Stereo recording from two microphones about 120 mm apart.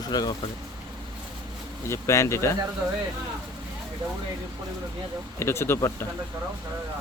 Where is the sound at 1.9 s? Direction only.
25° left (ahead or behind).